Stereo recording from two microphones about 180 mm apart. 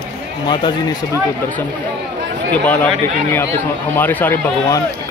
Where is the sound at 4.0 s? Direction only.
10° left (ahead or behind).